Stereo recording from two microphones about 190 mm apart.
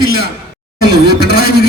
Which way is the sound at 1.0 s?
55° right (ahead or behind).